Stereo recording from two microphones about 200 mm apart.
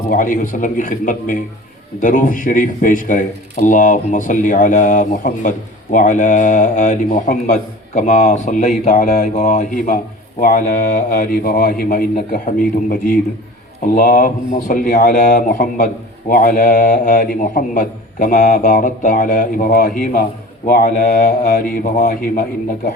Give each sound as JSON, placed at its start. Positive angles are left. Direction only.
{"t": 0.1, "sound": "speech", "side_deg": 45}